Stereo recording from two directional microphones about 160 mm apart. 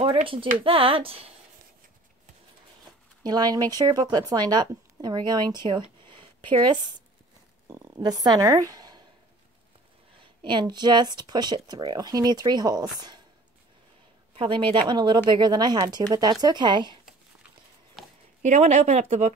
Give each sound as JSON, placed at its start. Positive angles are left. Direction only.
{"t": 0.0, "sound": "speech", "side_deg": -35}
{"t": 3.3, "sound": "speech", "side_deg": -25}
{"t": 10.4, "sound": "speech", "side_deg": -30}
{"t": 14.3, "sound": "speech", "side_deg": -35}
{"t": 18.0, "sound": "a sound", "side_deg": 0}
{"t": 18.4, "sound": "speech", "side_deg": -45}